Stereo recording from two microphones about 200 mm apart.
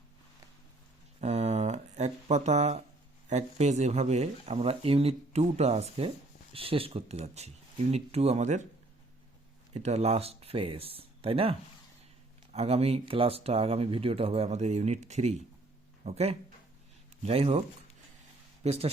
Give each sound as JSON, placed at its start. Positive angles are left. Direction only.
{"t": 1.2, "sound": "a sound", "side_deg": -30}
{"t": 3.2, "sound": "speech", "side_deg": -35}
{"t": 9.7, "sound": "speech", "side_deg": -35}
{"t": 12.5, "sound": "speech", "side_deg": -30}
{"t": 18.6, "sound": "speech", "side_deg": -30}